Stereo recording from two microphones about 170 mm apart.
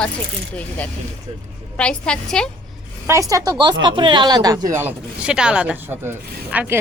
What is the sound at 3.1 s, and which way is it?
A woman's voice, 20° right (ahead or behind).